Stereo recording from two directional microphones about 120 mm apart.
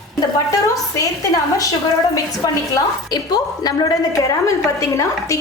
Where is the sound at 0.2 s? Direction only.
30° left (ahead or behind).